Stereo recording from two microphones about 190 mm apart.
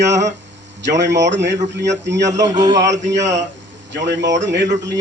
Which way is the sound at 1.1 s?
70° right (ahead or behind).